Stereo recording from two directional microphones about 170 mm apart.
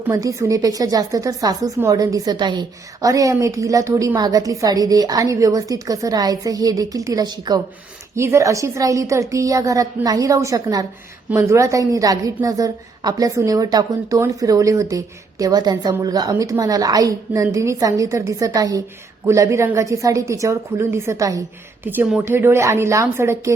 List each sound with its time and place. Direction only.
0.1 s a woman's voice: 20° right (ahead or behind)